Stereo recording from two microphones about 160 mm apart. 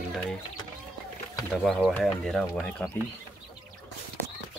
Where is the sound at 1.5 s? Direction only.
5° left (ahead or behind).